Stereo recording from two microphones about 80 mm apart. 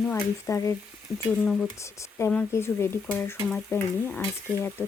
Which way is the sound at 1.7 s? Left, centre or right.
Left.